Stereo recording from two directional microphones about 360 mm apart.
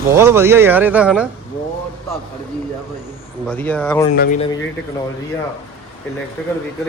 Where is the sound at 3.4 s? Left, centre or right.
Centre.